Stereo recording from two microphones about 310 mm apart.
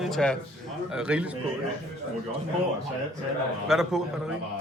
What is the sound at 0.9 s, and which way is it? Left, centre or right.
Speech, centre.